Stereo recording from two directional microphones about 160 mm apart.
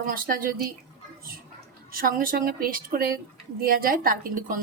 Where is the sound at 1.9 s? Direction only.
65° right (ahead or behind).